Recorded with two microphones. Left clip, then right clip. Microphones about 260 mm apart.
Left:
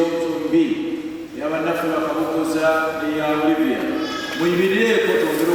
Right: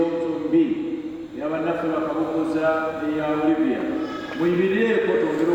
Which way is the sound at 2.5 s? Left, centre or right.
Centre.